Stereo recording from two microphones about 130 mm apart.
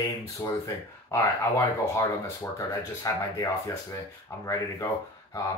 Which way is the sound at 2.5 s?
25° left (ahead or behind).